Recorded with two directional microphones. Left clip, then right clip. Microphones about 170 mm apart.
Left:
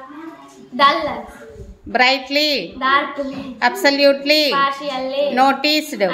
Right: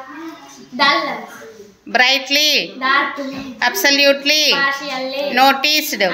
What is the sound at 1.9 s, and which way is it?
A woman's voice, 10° left (ahead or behind).